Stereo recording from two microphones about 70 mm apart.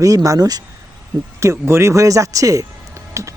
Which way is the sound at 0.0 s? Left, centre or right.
Right.